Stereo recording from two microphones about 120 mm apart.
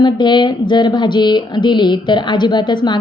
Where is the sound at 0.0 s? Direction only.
40° left (ahead or behind).